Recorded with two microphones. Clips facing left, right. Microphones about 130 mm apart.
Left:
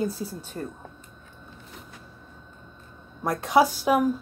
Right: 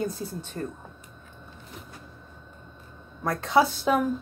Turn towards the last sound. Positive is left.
turn(degrees=10)  # may be behind; listen again after turning